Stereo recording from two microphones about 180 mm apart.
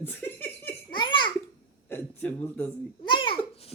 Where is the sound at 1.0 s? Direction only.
25° left (ahead or behind).